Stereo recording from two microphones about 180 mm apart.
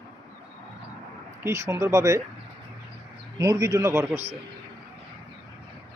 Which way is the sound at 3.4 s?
20° right (ahead or behind).